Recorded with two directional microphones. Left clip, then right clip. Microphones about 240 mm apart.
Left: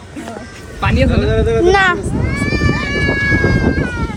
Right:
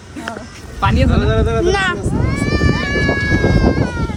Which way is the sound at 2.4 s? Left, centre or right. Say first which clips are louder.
Left 1 dB; right.